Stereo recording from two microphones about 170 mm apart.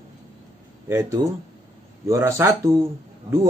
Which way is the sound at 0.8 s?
20° right (ahead or behind).